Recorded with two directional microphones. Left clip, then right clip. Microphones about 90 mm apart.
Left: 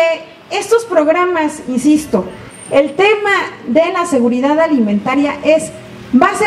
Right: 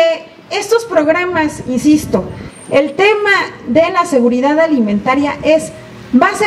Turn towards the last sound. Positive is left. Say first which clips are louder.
# even
turn(degrees=-25)  # may be behind; listen again after turning